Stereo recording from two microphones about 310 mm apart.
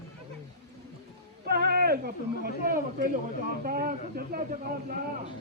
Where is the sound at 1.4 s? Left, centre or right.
Right.